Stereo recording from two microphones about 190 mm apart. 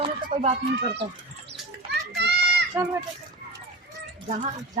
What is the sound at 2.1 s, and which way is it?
Children playing, 60° right (ahead or behind).